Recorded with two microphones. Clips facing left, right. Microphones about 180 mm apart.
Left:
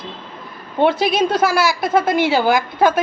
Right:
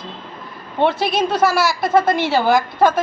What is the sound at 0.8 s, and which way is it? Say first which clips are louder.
A woman's voice: left 2 dB; centre (ahead or behind).